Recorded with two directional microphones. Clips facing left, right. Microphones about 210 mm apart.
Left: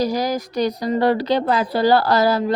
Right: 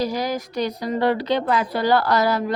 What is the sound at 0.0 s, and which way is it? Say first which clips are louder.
A woman's voice: left 3 dB; 40° left (ahead or behind).